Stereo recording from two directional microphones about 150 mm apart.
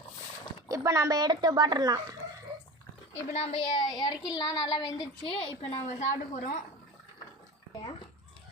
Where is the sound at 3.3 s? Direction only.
45° left (ahead or behind).